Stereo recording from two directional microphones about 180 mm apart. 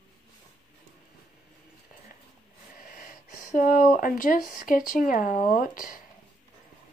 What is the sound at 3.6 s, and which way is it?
Speech, 50° left (ahead or behind).